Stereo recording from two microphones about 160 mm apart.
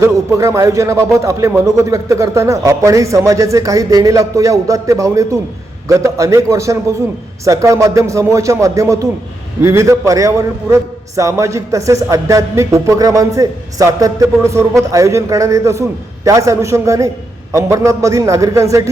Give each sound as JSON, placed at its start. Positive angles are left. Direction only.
{"t": 0.0, "sound": "a man's voice", "side_deg": -20}